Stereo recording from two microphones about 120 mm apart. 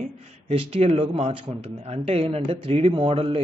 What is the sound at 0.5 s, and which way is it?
Speech, 55° right (ahead or behind).